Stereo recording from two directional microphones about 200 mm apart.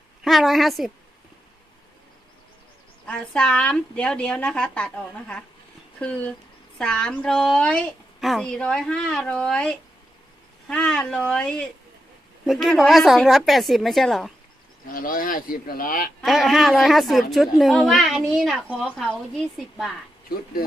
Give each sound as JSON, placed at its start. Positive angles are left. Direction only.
{"t": 0.3, "sound": "a child's voice", "side_deg": 0}
{"t": 3.1, "sound": "a child's voice", "side_deg": 5}
{"t": 6.0, "sound": "a child's voice", "side_deg": 5}
{"t": 14.9, "sound": "speech", "side_deg": 45}
{"t": 16.2, "sound": "a child's voice", "side_deg": 0}